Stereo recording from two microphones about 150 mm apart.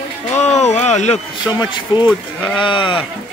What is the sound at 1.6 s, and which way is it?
Speech, 30° left (ahead or behind).